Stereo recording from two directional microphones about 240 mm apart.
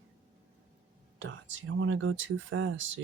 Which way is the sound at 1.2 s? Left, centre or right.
Right.